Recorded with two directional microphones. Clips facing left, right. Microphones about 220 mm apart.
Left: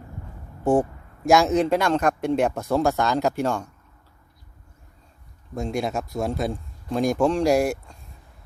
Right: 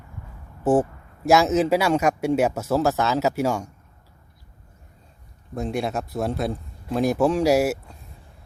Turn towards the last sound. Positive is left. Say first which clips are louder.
# right 1 dB
turn(degrees=-5)  # may be behind; listen again after turning